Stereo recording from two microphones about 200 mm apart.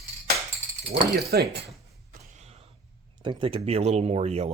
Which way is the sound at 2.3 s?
35° right (ahead or behind).